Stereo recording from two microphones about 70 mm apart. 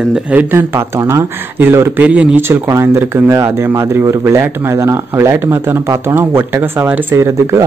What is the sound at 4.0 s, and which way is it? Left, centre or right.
Speech, right.